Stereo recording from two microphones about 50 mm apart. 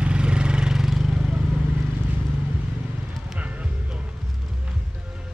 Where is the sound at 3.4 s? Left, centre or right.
Right.